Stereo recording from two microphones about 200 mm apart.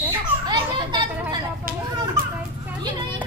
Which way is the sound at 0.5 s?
20° right (ahead or behind).